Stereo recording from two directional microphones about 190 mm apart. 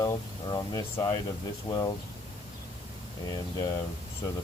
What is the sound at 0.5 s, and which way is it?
Speech, 25° left (ahead or behind).